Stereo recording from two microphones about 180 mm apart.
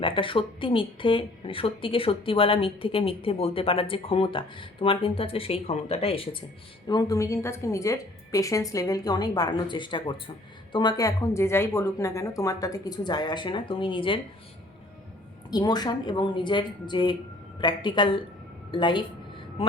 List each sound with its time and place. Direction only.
0.0 s a woman's voice: 30° left (ahead or behind)
15.4 s a woman's voice: 20° left (ahead or behind)